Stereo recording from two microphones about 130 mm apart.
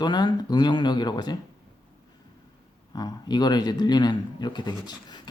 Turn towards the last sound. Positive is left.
turn(degrees=35)  # may be behind; listen again after turning